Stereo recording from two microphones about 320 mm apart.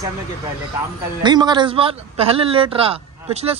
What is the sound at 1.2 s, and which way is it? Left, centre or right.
A man's voice, centre.